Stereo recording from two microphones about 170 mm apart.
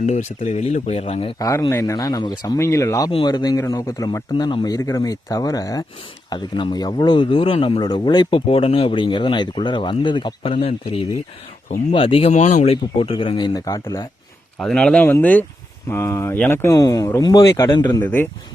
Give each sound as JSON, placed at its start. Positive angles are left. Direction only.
{"t": 0.0, "sound": "speech", "side_deg": 45}
{"t": 1.4, "sound": "speech", "side_deg": 20}
{"t": 3.1, "sound": "speech", "side_deg": 30}
{"t": 12.7, "sound": "speech", "side_deg": 30}
{"t": 14.6, "sound": "speech", "side_deg": 5}
{"t": 18.0, "sound": "speech", "side_deg": 10}